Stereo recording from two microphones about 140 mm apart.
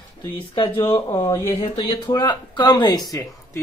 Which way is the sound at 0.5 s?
40° left (ahead or behind).